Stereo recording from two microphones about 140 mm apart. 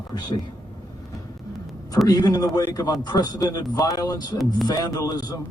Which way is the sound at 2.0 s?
25° left (ahead or behind).